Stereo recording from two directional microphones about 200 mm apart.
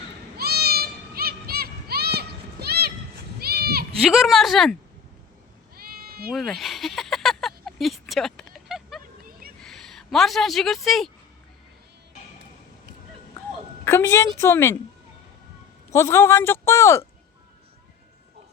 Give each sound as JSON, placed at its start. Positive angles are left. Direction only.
{"t": 0.3, "sound": "a sound", "side_deg": -50}
{"t": 3.4, "sound": "goat", "side_deg": -50}
{"t": 4.0, "sound": "speech", "side_deg": 0}
{"t": 5.7, "sound": "sheep", "side_deg": -50}
{"t": 6.3, "sound": "a sound", "side_deg": 0}
{"t": 9.6, "sound": "speech", "side_deg": 0}
{"t": 13.8, "sound": "a man's voice", "side_deg": 10}
{"t": 15.9, "sound": "a man's voice", "side_deg": 15}